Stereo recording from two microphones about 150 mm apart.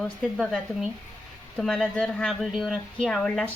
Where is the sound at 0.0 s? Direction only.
Centre (ahead or behind).